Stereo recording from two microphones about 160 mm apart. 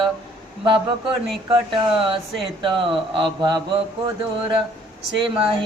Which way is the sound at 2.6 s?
30° right (ahead or behind).